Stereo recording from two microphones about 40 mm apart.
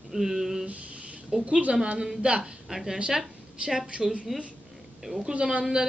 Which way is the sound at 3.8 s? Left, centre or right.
Right.